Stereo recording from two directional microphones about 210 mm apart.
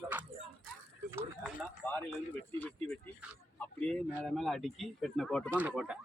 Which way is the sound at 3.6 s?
5° left (ahead or behind).